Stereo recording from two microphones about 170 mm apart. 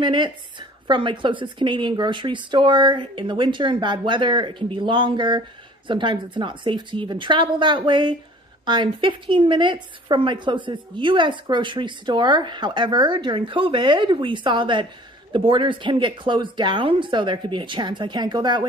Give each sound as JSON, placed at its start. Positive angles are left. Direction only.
{"t": 0.0, "sound": "a woman's voice", "side_deg": -30}